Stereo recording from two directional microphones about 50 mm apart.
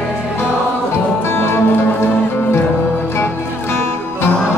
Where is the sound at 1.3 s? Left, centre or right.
Left.